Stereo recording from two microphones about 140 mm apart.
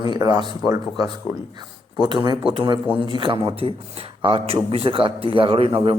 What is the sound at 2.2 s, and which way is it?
Speech, 35° right (ahead or behind).